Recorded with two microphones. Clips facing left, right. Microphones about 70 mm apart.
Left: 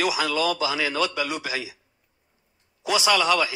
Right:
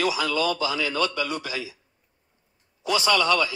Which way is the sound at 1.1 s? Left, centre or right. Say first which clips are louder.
Left 1 dB; left.